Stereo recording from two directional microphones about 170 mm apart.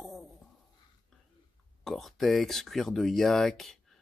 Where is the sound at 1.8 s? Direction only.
Centre (ahead or behind).